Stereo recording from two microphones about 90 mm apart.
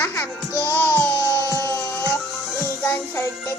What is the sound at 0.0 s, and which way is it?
Music, 25° left (ahead or behind).